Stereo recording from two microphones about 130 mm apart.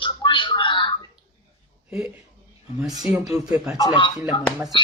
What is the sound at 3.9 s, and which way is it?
Speech, 40° left (ahead or behind).